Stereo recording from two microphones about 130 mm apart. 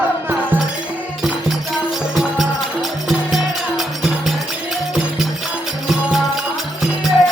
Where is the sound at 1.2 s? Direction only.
Centre (ahead or behind).